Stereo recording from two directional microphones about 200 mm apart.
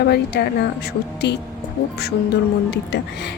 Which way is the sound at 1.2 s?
55° left (ahead or behind).